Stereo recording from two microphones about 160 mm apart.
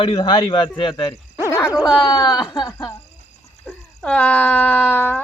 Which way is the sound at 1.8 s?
5° right (ahead or behind).